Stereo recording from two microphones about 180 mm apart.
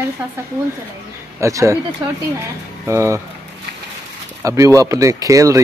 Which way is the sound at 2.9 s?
15° right (ahead or behind).